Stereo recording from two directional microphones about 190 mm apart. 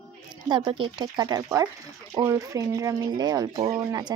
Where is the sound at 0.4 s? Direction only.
25° right (ahead or behind).